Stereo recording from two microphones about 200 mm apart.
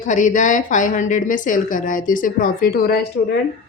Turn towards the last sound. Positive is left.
turn(degrees=55)  # may be behind; listen again after turning